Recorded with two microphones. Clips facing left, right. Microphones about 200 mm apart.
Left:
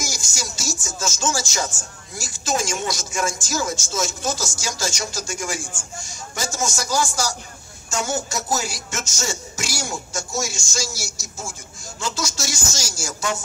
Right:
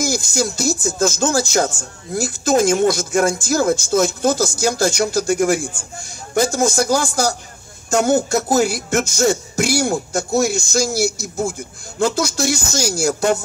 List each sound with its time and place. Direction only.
0.0 s speech: 60° right (ahead or behind)